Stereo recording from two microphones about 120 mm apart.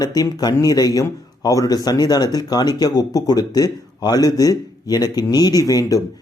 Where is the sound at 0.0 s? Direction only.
35° left (ahead or behind).